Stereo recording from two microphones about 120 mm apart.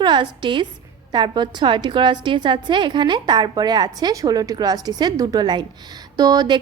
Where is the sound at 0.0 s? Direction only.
40° right (ahead or behind).